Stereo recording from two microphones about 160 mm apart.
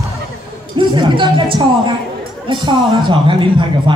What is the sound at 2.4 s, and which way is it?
Speech, 30° right (ahead or behind).